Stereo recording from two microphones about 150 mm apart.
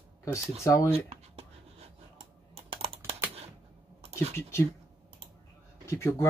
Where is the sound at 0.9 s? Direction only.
40° right (ahead or behind).